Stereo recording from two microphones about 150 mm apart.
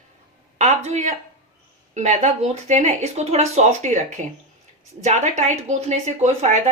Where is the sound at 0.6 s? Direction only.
50° right (ahead or behind).